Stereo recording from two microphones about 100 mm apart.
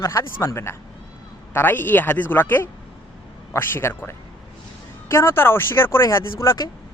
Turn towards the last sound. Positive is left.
turn(degrees=30)  # may be behind; listen again after turning